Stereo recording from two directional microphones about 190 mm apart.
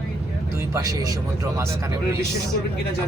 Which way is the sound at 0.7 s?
15° right (ahead or behind).